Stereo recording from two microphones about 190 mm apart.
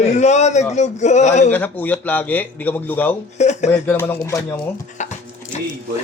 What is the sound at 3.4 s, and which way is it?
Speech, 35° left (ahead or behind).